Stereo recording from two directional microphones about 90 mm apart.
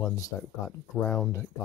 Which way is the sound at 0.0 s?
35° left (ahead or behind).